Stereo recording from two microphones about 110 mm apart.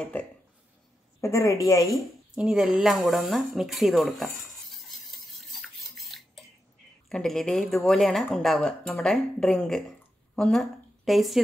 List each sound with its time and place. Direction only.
0.0 s speech: 15° left (ahead or behind)
1.2 s a woman's voice: 25° left (ahead or behind)
2.3 s speech: 5° right (ahead or behind)
5.4 s bathtub: centre (ahead or behind)
7.1 s speech: 5° left (ahead or behind)
9.8 s a sound: 5° left (ahead or behind)